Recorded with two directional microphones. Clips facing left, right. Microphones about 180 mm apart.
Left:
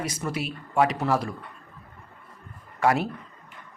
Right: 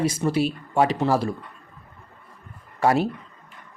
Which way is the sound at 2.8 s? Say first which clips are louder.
Right 3 dB; 30° right (ahead or behind).